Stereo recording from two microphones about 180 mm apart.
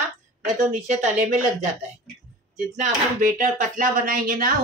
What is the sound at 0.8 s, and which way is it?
A woman's voice, 40° right (ahead or behind).